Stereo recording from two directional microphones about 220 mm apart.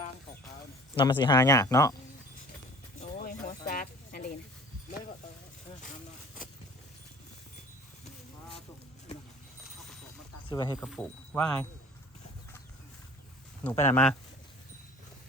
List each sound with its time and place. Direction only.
0.9 s speech: 20° left (ahead or behind)
3.0 s a sound: 35° left (ahead or behind)
9.6 s a sound: centre (ahead or behind)
10.5 s speech: 20° left (ahead or behind)
10.8 s speech: centre (ahead or behind)
13.7 s speech: 10° left (ahead or behind)